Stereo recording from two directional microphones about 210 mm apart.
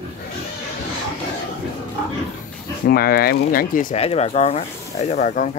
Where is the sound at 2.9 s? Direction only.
45° left (ahead or behind).